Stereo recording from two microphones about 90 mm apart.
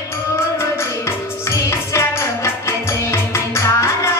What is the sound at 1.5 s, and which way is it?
Music, 30° left (ahead or behind).